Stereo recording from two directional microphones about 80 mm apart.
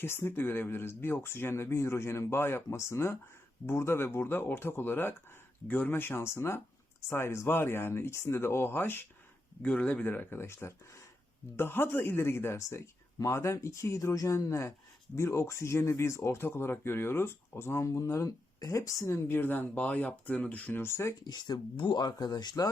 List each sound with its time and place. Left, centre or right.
0.0 s speech: left
9.6 s speech: centre; by 21.2 s left
21.2 s speech: left